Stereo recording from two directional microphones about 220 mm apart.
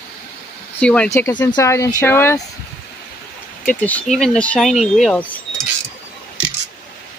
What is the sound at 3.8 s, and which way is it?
Speech, 5° left (ahead or behind).